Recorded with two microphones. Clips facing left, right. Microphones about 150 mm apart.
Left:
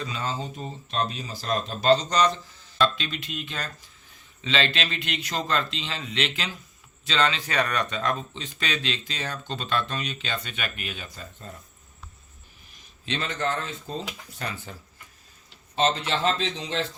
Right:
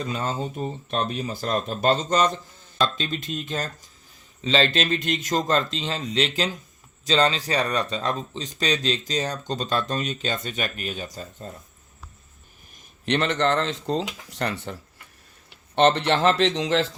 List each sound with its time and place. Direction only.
0.0 s speech: 45° right (ahead or behind)
13.1 s speech: 70° right (ahead or behind); by 17.0 s 90° right